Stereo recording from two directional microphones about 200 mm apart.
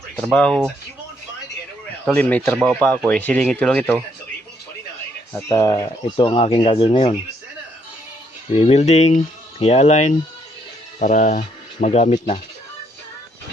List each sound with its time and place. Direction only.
0.2 s speech: 5° left (ahead or behind)
2.0 s speech: 5° left (ahead or behind)
5.3 s speech: 15° left (ahead or behind)
8.5 s speech: 30° left (ahead or behind)